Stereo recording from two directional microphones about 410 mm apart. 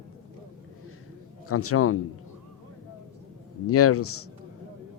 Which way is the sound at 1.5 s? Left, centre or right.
Left.